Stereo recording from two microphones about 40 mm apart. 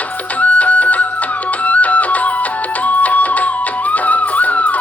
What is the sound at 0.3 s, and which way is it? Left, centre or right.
Music, left.